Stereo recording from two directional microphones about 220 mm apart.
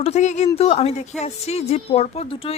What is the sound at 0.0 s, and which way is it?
A woman's voice, 30° left (ahead or behind).